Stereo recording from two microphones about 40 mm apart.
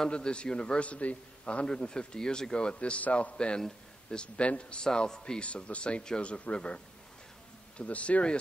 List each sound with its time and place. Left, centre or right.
0.1 s a man's voice: left
0.8 s a man's voice: left
4.8 s a man's voice: centre
5.7 s a man's voice: left